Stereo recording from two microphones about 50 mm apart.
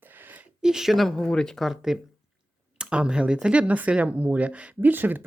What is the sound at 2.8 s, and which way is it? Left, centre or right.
Speech, centre.